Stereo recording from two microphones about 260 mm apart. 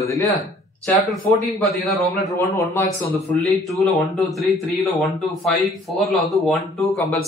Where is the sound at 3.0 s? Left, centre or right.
Left.